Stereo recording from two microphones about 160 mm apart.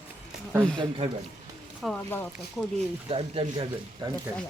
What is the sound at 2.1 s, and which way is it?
Speech, 15° left (ahead or behind).